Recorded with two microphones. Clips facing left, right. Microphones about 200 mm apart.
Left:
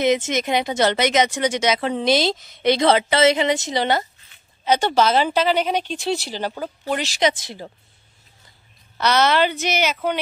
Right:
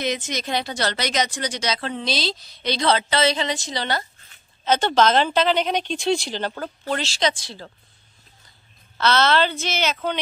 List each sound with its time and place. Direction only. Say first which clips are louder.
0.0 s speech: left 7 dB; 20° left (ahead or behind)
4.6 s speech: left 1 dB; 10° left (ahead or behind)
8.9 s speech: left 1 dB; 15° left (ahead or behind)